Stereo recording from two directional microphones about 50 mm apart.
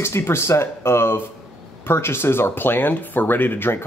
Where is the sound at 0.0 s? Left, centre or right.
Left.